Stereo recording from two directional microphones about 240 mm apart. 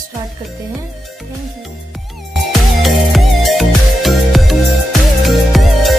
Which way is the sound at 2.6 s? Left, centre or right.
Centre.